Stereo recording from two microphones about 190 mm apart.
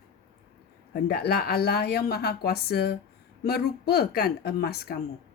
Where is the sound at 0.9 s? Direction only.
55° left (ahead or behind).